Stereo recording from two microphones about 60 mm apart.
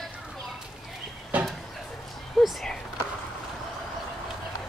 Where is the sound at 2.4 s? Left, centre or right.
Centre.